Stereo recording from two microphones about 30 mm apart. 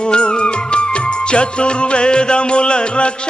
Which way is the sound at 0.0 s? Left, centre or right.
Left.